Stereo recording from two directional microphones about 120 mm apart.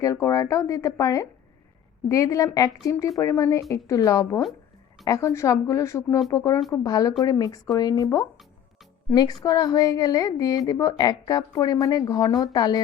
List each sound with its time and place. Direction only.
0.0 s speech: 25° left (ahead or behind)